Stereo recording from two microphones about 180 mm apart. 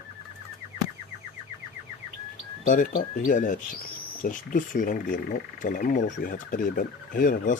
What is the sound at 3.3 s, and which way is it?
Speech, 45° left (ahead or behind).